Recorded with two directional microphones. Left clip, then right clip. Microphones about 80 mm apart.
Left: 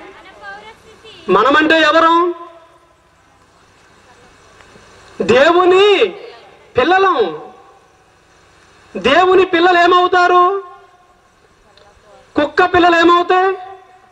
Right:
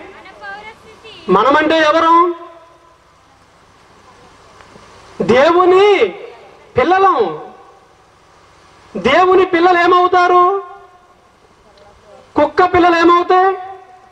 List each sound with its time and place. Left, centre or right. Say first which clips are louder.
0.2 s a sound: right 4 dB; right
1.2 s a man's voice: even; centre
5.1 s a man's voice: even; centre
8.9 s a man's voice: even; centre
12.4 s a man's voice: right 1 dB; centre